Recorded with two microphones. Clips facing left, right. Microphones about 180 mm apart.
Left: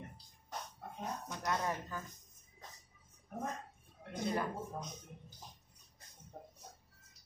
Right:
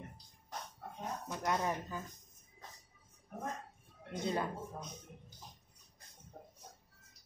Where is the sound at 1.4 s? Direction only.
20° right (ahead or behind).